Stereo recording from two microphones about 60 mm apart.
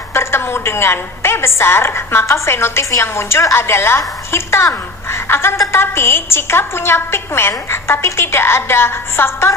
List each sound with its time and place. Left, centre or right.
0.1 s a woman's voice: left